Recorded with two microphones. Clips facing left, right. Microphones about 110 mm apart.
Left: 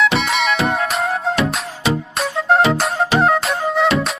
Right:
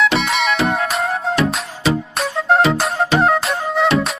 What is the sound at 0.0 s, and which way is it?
Music, centre (ahead or behind).